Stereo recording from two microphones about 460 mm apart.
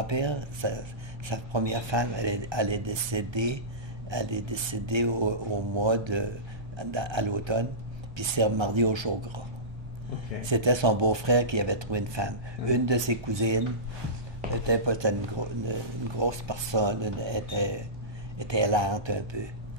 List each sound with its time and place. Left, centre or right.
0.0 s speech: right
10.5 s speech: right